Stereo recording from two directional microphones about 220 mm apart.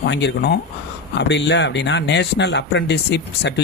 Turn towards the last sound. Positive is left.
turn(degrees=50)  # may be behind; listen again after turning